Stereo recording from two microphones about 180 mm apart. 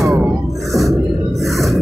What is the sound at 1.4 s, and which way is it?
Music, centre (ahead or behind).